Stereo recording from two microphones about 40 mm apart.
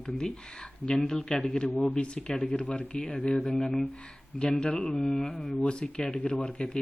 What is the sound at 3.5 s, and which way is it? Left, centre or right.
Speech, centre.